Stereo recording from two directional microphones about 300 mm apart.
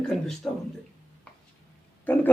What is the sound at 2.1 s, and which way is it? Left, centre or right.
Speech, centre.